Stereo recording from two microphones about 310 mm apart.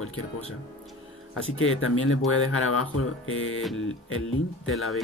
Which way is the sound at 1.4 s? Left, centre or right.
Left.